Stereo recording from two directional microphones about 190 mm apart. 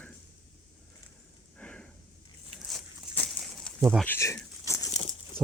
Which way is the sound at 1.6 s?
5° left (ahead or behind).